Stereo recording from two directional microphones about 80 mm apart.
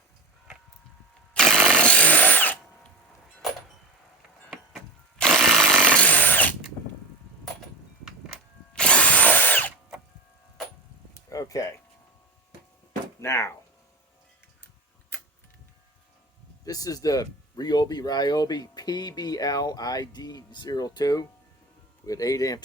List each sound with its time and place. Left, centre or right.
1.3 s tools: centre; by 2.6 s left
5.1 s drill: centre
8.7 s drill: centre
11.1 s a sound: left
13.2 s speech: left
15.1 s a sound: left
16.6 s speech: left